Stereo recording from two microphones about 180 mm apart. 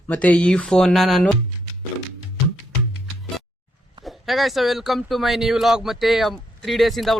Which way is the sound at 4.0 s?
Centre (ahead or behind).